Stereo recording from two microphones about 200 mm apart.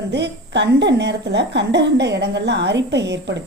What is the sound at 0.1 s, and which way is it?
A woman's voice, 60° right (ahead or behind).